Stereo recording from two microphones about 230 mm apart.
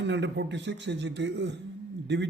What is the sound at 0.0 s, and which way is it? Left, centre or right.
A man's voice, right.